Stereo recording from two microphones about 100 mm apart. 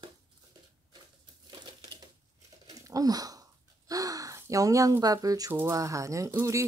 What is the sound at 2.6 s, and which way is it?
Gasp, 35° right (ahead or behind).